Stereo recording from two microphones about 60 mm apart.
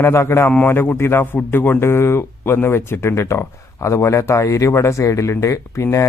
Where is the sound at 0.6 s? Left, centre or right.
Left.